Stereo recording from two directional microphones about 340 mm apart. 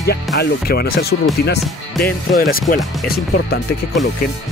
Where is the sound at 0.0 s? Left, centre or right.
Left.